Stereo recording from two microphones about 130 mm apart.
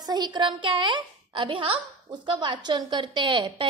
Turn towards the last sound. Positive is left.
turn(degrees=-35)  # may be behind; listen again after turning